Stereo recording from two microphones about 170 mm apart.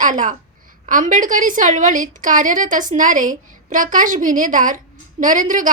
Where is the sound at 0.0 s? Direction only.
50° right (ahead or behind).